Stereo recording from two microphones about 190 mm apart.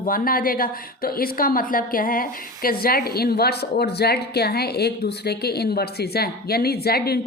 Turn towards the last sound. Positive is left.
turn(degrees=55)  # may be behind; listen again after turning